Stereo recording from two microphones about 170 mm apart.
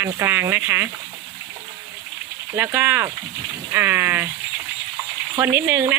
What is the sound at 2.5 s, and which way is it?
Speech, 10° right (ahead or behind).